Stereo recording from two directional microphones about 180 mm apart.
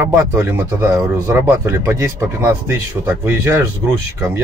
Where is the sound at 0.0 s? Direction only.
15° right (ahead or behind).